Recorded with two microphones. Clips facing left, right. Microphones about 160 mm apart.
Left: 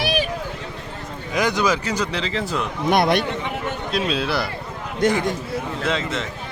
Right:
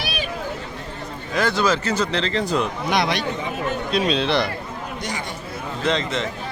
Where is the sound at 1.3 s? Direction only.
15° left (ahead or behind).